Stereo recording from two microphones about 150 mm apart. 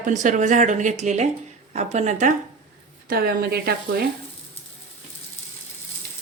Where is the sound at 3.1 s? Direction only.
85° right.